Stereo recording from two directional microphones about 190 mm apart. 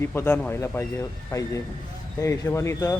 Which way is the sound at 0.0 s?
10° left (ahead or behind).